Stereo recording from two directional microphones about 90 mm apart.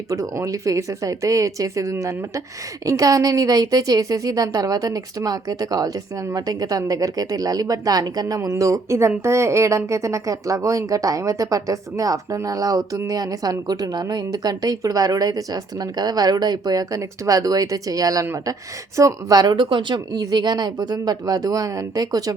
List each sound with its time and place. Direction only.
0.1 s a woman's voice: 35° right (ahead or behind)